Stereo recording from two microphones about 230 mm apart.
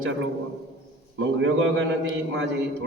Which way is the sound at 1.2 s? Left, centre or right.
Right.